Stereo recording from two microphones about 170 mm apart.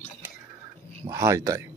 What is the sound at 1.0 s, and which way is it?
Speech, 20° right (ahead or behind).